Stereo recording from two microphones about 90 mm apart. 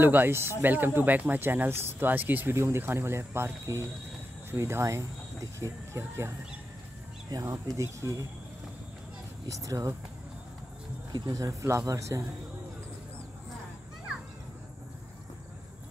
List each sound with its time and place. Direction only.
0.0 s speech: 25° right (ahead or behind)
7.4 s speech: 35° right (ahead or behind)
9.5 s speech: 40° right (ahead or behind)
11.1 s speech: 50° right (ahead or behind)